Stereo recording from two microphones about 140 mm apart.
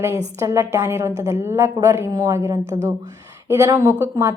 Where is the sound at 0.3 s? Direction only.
20° right (ahead or behind).